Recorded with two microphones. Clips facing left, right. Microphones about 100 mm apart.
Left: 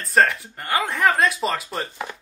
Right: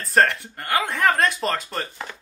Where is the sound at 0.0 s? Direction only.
Centre (ahead or behind).